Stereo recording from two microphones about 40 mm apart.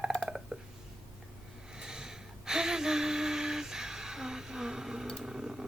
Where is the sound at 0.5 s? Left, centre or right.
Right.